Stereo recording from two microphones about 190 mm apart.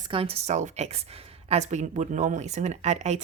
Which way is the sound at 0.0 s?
30° right (ahead or behind).